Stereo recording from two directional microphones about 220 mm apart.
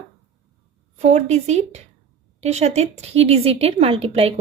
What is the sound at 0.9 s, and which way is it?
A woman's voice, 30° right (ahead or behind).